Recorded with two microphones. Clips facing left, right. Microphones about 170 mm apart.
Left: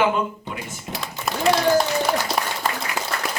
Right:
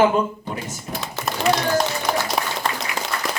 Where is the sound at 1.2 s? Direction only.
90° right.